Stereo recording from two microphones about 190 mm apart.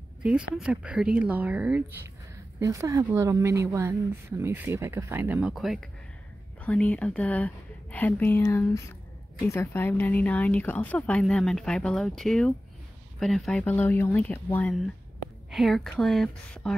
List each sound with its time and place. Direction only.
0.2 s a woman's voice: 5° right (ahead or behind)